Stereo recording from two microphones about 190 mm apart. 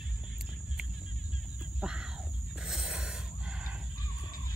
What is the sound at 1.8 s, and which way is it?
Music, 5° right (ahead or behind).